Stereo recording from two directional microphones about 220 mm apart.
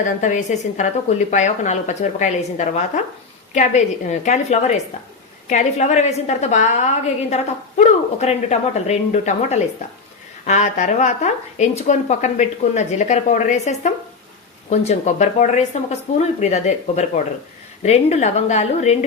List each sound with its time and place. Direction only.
0.0 s a woman's voice: 35° left (ahead or behind)